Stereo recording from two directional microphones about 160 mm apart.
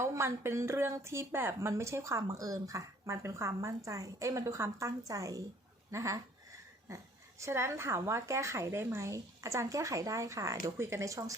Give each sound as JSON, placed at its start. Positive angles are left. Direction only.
{"t": 0.0, "sound": "a woman's voice", "side_deg": -20}